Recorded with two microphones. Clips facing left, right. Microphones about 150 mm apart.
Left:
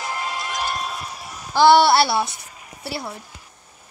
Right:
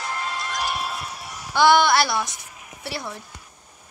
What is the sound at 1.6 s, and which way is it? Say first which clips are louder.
Speech: left 3 dB; 35° left (ahead or behind).